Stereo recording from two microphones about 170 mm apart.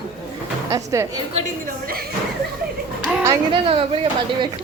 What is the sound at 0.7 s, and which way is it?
Speech, 20° right (ahead or behind).